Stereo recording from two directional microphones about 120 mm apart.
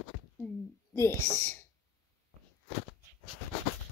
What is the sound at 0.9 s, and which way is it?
Speech, 20° left (ahead or behind).